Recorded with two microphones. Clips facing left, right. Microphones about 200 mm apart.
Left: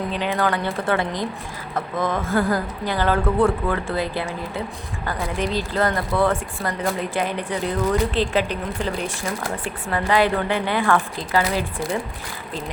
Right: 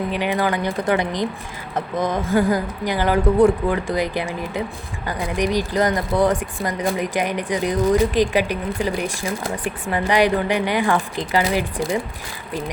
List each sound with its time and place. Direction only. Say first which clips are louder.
0.1 s speech: even; 15° right (ahead or behind)